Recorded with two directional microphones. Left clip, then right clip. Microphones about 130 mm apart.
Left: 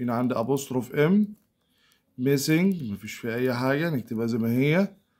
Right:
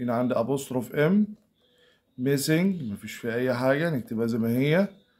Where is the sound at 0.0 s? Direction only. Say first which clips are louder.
Right 1 dB; 35° left (ahead or behind).